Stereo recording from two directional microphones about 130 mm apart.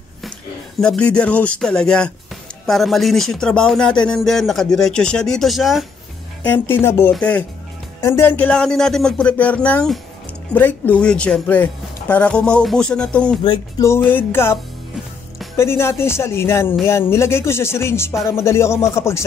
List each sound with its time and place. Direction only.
0.7 s speech: 5° left (ahead or behind)
6.4 s speech: 15° left (ahead or behind)
13.7 s speech: 20° left (ahead or behind)